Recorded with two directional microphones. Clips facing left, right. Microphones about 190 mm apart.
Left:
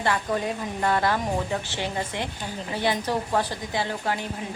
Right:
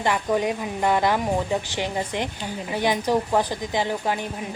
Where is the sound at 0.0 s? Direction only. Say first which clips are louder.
Right 3 dB; 15° right (ahead or behind).